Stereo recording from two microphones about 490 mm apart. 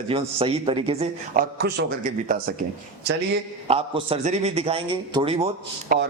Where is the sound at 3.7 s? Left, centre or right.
Centre.